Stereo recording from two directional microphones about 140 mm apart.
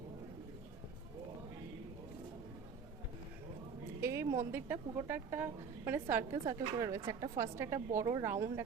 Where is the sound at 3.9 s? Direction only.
20° right (ahead or behind).